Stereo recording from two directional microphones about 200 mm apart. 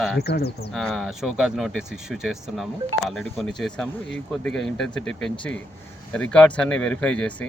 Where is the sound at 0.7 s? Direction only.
Centre (ahead or behind).